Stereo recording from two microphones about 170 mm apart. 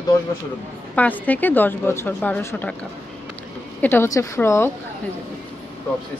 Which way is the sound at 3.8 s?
15° left (ahead or behind).